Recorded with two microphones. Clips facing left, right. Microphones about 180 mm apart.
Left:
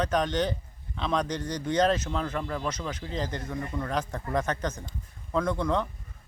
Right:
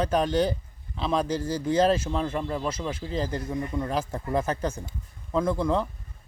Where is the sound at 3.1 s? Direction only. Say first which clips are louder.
Right 4 dB; 35° right (ahead or behind).